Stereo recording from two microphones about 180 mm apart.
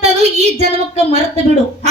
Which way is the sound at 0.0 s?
40° right (ahead or behind).